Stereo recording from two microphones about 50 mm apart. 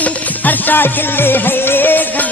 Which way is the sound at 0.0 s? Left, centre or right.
Left.